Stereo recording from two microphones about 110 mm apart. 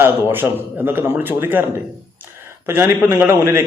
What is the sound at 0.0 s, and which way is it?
A man's voice, 20° right (ahead or behind).